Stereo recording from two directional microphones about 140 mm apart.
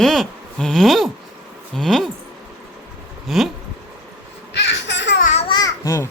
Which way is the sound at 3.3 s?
Centre (ahead or behind).